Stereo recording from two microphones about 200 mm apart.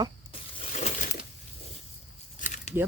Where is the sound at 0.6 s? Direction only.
35° left (ahead or behind).